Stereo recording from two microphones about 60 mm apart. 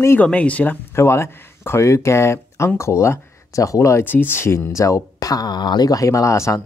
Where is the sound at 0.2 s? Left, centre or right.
Left.